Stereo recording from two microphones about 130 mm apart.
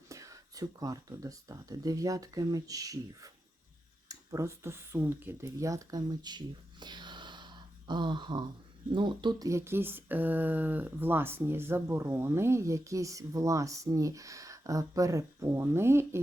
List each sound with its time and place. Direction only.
0.1 s speech: 25° right (ahead or behind)
9.5 s speech: 20° right (ahead or behind)